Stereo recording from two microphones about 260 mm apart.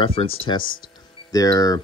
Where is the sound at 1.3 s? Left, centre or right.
Centre.